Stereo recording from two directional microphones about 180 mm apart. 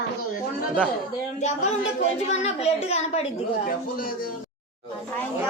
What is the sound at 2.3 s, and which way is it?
Speech, 35° left (ahead or behind).